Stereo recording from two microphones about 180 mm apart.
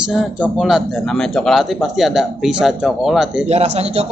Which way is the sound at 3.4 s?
35° right (ahead or behind).